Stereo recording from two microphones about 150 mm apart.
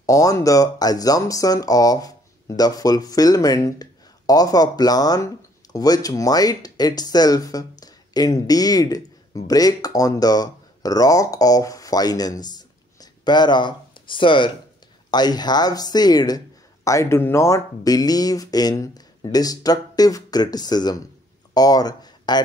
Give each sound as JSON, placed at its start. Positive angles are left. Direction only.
{"t": 0.0, "sound": "speech", "side_deg": 20}